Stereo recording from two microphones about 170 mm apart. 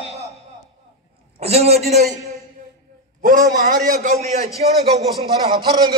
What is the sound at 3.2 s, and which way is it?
Speech, 55° right (ahead or behind).